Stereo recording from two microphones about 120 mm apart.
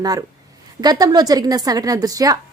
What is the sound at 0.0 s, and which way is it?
A woman's voice, 30° right (ahead or behind).